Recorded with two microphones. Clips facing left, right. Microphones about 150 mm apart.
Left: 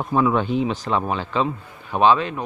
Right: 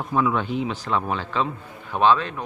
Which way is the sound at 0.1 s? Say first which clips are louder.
Left 3 dB; 30° left (ahead or behind).